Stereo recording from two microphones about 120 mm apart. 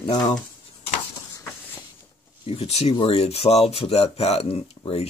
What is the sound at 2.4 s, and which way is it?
Speech, 55° left (ahead or behind).